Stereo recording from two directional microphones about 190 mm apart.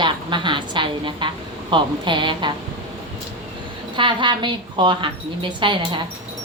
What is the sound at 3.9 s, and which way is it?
Speech, 25° right (ahead or behind).